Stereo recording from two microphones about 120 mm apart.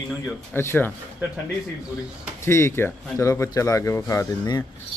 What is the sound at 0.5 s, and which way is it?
Speech, 20° left (ahead or behind).